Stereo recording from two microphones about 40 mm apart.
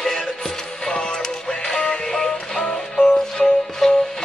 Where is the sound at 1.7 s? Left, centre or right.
Centre.